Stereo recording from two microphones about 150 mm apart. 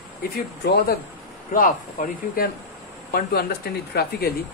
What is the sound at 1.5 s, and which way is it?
Speech, 65° left (ahead or behind).